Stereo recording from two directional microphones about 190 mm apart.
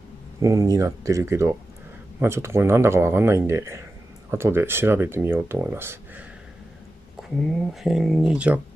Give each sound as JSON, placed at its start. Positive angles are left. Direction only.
{"t": 0.4, "sound": "speech", "side_deg": -15}
{"t": 7.2, "sound": "speech", "side_deg": 0}